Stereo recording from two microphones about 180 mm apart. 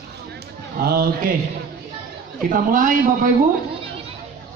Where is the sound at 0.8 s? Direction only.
60° right (ahead or behind).